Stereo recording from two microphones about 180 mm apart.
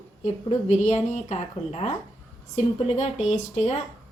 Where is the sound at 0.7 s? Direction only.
40° left (ahead or behind).